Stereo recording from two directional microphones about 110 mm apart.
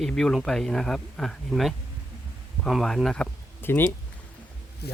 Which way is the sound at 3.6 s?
20° left (ahead or behind).